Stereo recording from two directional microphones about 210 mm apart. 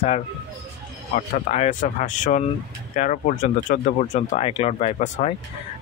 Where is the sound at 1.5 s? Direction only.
35° left (ahead or behind).